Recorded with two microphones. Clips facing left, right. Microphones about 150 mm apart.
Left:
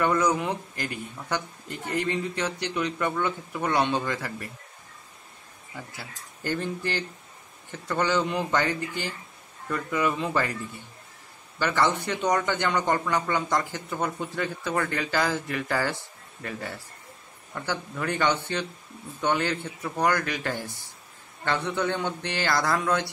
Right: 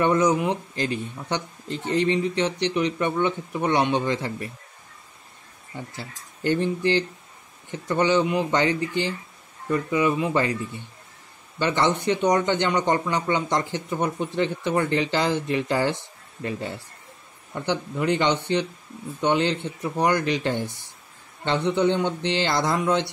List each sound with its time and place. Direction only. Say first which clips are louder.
0.0 s a man's voice: right 4 dB; 20° right (ahead or behind)
5.8 s a man's voice: right 4 dB; 20° right (ahead or behind)